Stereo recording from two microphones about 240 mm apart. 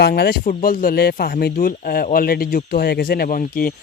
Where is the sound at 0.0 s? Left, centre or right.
Left.